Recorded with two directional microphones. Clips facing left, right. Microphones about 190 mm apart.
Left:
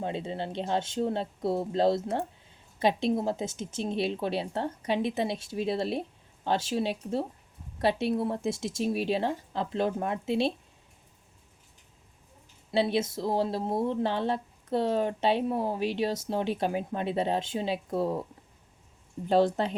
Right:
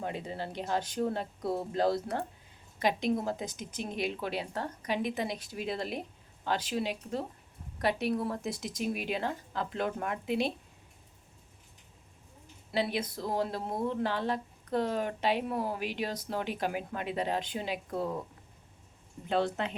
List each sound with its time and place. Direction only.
0.0 s speech: 25° left (ahead or behind)
12.7 s speech: 25° left (ahead or behind)
19.3 s speech: 35° left (ahead or behind)